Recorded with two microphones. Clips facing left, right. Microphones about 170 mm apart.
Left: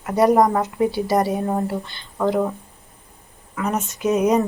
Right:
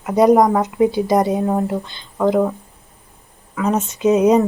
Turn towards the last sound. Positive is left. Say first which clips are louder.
# right 5 dB
turn(degrees=-20)  # may be behind; listen again after turning